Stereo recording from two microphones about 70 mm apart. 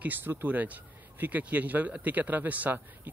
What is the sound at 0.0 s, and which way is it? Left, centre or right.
Speech, right.